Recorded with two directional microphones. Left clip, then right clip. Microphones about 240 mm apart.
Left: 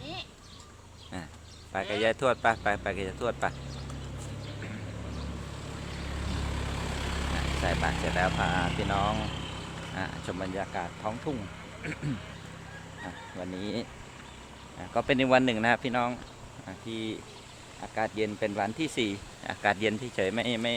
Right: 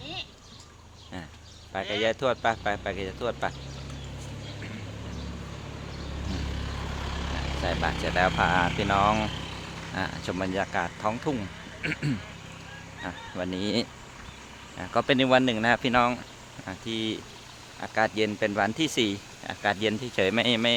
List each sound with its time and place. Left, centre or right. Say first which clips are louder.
0.0 s a sound: right 3 dB; centre
1.7 s speech: right 1 dB; centre
7.1 s vehicle: even; left
7.6 s speech: right 2 dB; centre; by 12.0 s right
13.1 s speech: right 6 dB; right
14.8 s speech: right 3 dB; right
15.8 s speech: right 6 dB; right
19.5 s speech: right 1 dB; centre